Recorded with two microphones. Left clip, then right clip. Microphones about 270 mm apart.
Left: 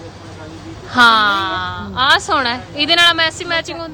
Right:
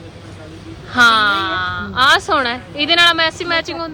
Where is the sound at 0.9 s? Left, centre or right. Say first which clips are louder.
Left 1 dB; centre.